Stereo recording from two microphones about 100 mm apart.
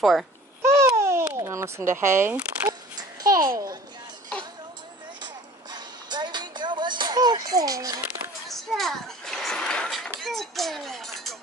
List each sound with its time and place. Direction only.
0.0 s a child's voice: centre (ahead or behind)
0.6 s babbling: 25° right (ahead or behind)
1.3 s speech: 30° right (ahead or behind)
3.0 s babbling: 35° right (ahead or behind)
5.7 s a sound: 45° right (ahead or behind)
8.5 s splash: centre (ahead or behind)